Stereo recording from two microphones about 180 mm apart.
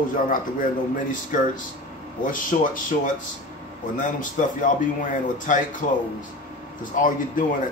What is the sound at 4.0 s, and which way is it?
Speech, 45° left (ahead or behind).